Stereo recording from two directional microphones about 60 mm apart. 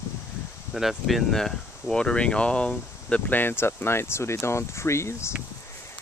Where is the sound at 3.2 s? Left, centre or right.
Left.